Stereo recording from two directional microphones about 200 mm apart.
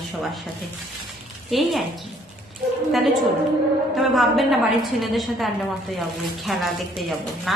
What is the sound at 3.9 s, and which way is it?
A woman's voice, centre (ahead or behind).